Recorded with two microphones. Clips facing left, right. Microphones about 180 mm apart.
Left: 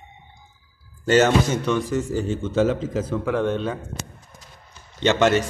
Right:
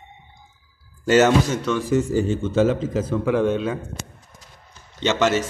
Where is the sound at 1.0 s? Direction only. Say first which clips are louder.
Right 1 dB; 5° right (ahead or behind).